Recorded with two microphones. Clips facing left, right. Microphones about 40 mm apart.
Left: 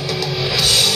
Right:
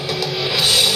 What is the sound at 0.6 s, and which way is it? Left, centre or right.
Music, centre.